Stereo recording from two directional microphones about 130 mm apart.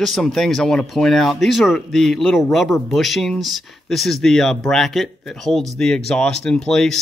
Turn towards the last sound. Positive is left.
turn(degrees=5)  # may be behind; listen again after turning